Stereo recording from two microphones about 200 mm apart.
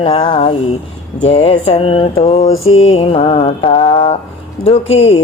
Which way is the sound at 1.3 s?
30° left (ahead or behind).